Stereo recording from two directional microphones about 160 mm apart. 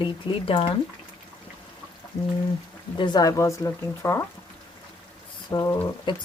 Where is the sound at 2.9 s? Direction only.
25° left (ahead or behind).